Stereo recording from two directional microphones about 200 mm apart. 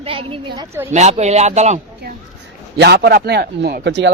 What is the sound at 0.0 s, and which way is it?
Speech, 30° right (ahead or behind).